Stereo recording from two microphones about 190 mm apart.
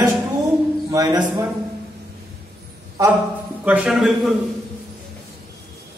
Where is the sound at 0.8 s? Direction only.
20° right (ahead or behind).